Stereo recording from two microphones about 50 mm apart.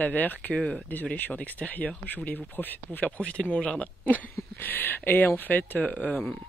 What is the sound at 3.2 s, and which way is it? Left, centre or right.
Speech, left.